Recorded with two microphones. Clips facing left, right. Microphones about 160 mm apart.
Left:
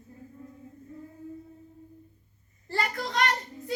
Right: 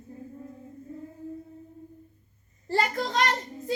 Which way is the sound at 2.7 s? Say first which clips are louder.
Right 4 dB; 25° right (ahead or behind).